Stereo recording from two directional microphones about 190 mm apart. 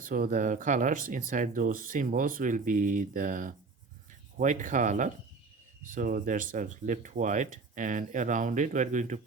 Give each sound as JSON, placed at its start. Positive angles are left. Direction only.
{"t": 0.0, "sound": "speech", "side_deg": -45}